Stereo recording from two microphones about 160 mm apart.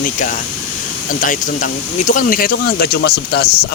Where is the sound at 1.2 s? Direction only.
55° left (ahead or behind); by 3.7 s 80° left.